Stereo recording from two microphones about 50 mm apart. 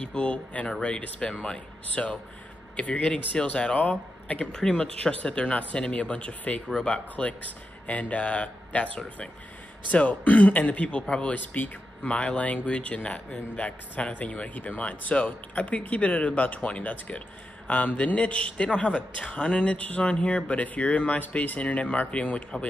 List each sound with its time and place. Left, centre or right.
0.0 s a man's voice: left
4.5 s a man's voice: centre
11.3 s speech: left
12.0 s a man's voice: left